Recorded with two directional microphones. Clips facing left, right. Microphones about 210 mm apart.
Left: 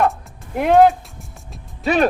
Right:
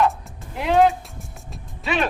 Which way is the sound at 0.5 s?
50° left (ahead or behind).